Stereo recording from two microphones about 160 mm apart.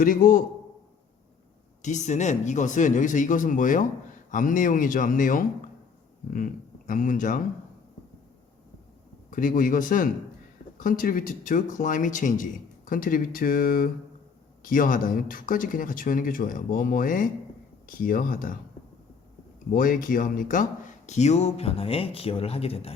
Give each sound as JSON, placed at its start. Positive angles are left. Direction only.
{"t": 0.0, "sound": "speech", "side_deg": 60}
{"t": 1.8, "sound": "speech", "side_deg": 50}
{"t": 9.3, "sound": "speech", "side_deg": 55}
{"t": 19.7, "sound": "speech", "side_deg": 60}
{"t": 21.1, "sound": "speech", "side_deg": 45}